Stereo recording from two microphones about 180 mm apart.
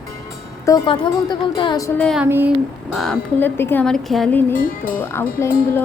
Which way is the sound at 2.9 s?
Centre (ahead or behind).